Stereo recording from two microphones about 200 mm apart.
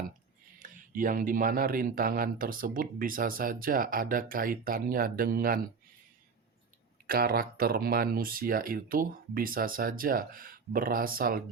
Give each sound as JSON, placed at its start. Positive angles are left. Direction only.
{"t": 0.6, "sound": "speech", "side_deg": -40}
{"t": 7.1, "sound": "speech", "side_deg": -50}